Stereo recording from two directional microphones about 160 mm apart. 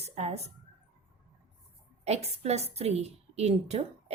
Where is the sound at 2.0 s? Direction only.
40° right (ahead or behind).